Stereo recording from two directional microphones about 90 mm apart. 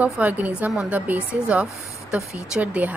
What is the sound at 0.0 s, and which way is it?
A woman's voice, 15° right (ahead or behind).